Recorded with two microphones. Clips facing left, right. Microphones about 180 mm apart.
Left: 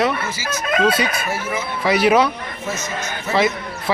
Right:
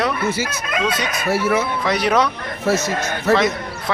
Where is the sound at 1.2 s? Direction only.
70° right (ahead or behind).